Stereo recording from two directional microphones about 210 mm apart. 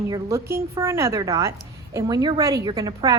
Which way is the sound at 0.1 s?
10° right (ahead or behind).